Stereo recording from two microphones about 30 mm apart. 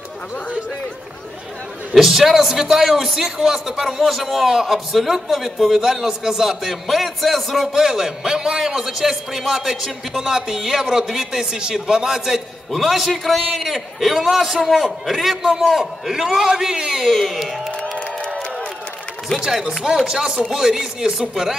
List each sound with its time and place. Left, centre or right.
2.0 s a man's voice: centre
7.7 s a man's voice: centre
12.7 s a man's voice: centre
14.3 s a man's voice: centre
17.0 s a man's voice: centre
19.3 s a man's voice: centre